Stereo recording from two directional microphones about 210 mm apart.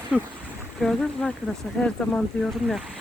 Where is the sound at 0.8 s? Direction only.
5° left (ahead or behind).